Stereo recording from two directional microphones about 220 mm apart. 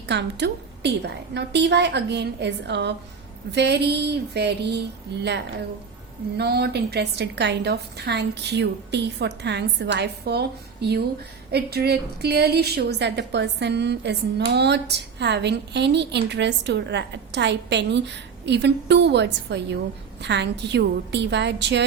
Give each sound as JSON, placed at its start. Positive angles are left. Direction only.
{"t": 0.1, "sound": "a woman's voice", "side_deg": -50}